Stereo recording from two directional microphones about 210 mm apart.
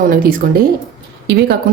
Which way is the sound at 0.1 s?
40° right (ahead or behind).